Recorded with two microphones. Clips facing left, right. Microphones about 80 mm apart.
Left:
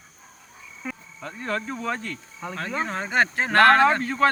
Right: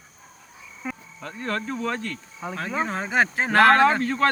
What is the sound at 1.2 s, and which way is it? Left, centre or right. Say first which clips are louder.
Speech: even; centre.